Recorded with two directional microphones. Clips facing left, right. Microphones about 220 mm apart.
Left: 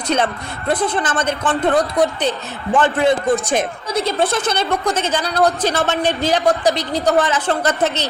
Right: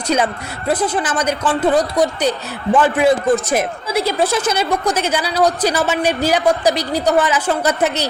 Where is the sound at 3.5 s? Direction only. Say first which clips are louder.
Right 1 dB; 5° right (ahead or behind).